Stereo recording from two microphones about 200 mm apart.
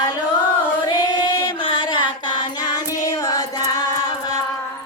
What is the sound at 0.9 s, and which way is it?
Choir, 20° left (ahead or behind).